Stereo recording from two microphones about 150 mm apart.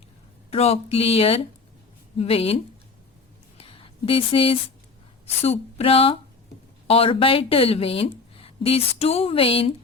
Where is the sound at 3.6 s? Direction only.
40° left (ahead or behind).